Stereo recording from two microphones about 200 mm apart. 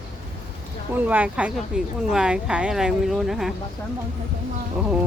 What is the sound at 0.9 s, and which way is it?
Speech, 5° right (ahead or behind).